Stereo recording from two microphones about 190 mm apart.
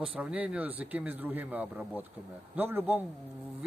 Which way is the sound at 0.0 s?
5° right (ahead or behind).